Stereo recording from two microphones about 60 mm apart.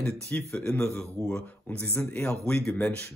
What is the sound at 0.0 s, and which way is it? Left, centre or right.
Speech, centre.